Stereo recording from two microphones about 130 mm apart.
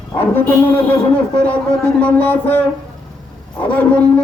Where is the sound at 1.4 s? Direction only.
10° left (ahead or behind).